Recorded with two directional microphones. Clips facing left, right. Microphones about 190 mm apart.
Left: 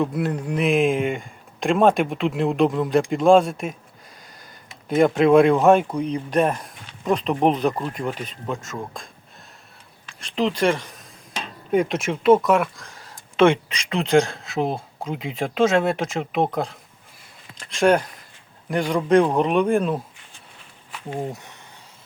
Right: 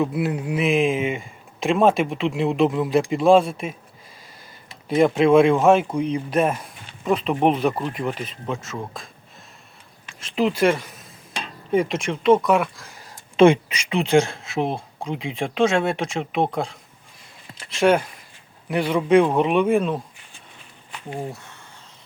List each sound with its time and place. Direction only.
0.0 s speech: 5° right (ahead or behind)
4.9 s speech: centre (ahead or behind)
10.2 s speech: 5° right (ahead or behind)
21.2 s speech: 20° left (ahead or behind)